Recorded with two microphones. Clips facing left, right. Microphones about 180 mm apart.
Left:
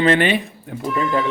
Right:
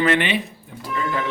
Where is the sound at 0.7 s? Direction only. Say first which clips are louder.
Left 10 dB; 60° left (ahead or behind).